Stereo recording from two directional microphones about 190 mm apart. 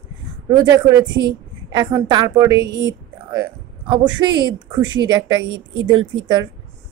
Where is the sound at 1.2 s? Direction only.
25° right (ahead or behind).